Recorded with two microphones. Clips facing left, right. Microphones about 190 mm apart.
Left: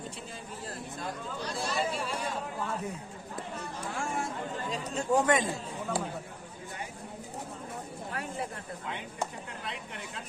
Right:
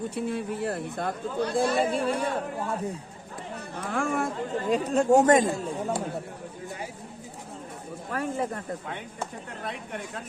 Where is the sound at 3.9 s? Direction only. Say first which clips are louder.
Right 8 dB; 60° right (ahead or behind).